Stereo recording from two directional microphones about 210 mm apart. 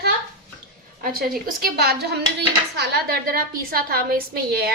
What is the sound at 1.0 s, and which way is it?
A woman's voice, 45° right (ahead or behind).